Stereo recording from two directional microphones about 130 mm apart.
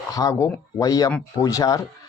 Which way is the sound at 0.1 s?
25° left (ahead or behind).